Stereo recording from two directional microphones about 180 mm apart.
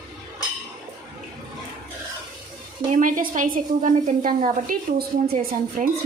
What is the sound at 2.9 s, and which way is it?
A woman's voice, 45° right (ahead or behind).